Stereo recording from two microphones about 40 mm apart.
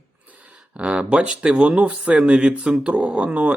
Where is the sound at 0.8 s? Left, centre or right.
Right.